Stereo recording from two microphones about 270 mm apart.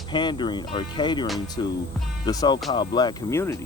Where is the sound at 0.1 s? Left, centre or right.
Centre.